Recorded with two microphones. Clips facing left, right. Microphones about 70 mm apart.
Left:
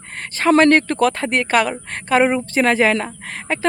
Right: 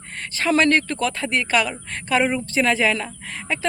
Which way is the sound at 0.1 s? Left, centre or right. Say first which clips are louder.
Left 6 dB; left.